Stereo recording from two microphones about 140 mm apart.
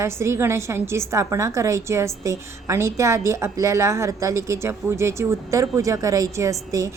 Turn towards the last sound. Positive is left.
turn(degrees=-20)  # may be behind; listen again after turning